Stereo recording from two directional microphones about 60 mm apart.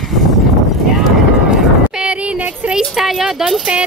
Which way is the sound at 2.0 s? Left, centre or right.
Centre.